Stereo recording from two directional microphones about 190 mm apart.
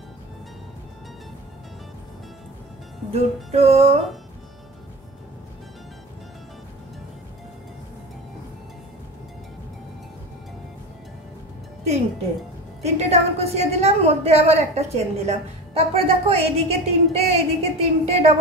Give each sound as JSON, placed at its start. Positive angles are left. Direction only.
{"t": 3.1, "sound": "a woman's voice", "side_deg": -35}
{"t": 12.8, "sound": "a woman's voice", "side_deg": -35}